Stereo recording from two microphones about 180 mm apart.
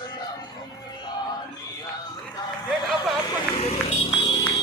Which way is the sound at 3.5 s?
35° left (ahead or behind).